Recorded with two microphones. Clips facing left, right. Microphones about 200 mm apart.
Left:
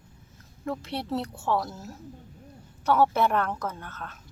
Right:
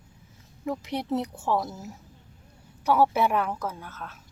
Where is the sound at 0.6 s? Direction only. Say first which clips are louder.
Right 2 dB; 15° right (ahead or behind).